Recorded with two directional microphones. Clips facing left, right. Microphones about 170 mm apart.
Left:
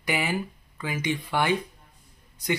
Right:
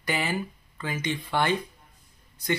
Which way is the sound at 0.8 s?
10° left (ahead or behind).